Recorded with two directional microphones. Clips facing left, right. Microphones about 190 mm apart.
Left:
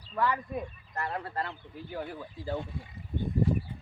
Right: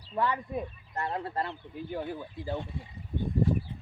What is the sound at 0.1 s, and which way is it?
Speech, 20° right (ahead or behind).